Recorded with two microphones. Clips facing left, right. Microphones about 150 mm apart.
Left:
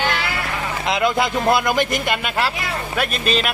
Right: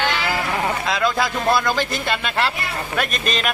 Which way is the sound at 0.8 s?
20° left (ahead or behind).